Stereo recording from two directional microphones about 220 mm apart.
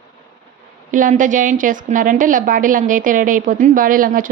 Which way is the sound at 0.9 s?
35° right (ahead or behind).